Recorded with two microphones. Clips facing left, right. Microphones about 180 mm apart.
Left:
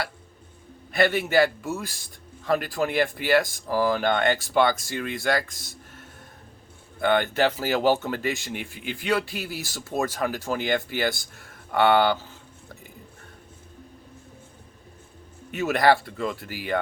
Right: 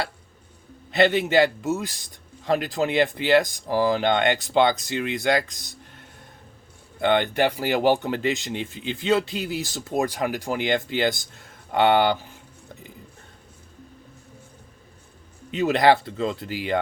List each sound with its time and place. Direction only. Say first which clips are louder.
0.9 s speech: right 3 dB; 20° right (ahead or behind)
15.5 s speech: right 2 dB; 20° right (ahead or behind)